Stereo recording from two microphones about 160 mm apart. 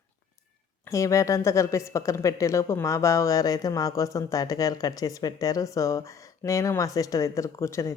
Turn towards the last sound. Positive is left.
turn(degrees=20)  # may be behind; listen again after turning